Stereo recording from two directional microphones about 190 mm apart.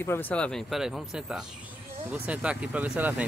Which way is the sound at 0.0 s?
10° left (ahead or behind).